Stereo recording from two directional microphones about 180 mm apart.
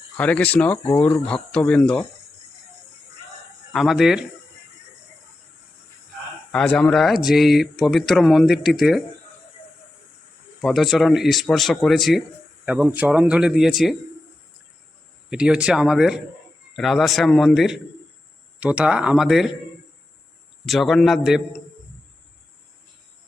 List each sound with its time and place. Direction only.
0.2 s speech: 10° left (ahead or behind)
1.3 s speech: 5° left (ahead or behind)
3.7 s speech: centre (ahead or behind)
6.5 s speech: 5° left (ahead or behind)
10.6 s speech: centre (ahead or behind)
15.3 s speech: 5° right (ahead or behind)
20.7 s speech: centre (ahead or behind)